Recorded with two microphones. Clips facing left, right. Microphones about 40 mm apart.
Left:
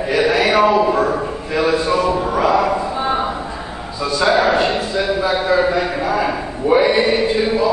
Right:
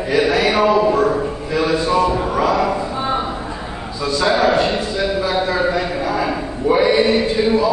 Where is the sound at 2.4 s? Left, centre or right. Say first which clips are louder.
Left 2 dB; centre.